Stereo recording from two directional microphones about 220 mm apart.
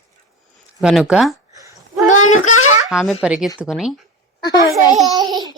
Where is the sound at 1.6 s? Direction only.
15° right (ahead or behind).